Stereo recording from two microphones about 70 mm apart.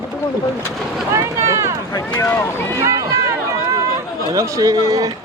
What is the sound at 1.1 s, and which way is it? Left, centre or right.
Speech, right.